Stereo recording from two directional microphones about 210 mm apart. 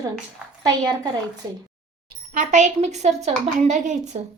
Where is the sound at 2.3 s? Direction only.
35° right (ahead or behind).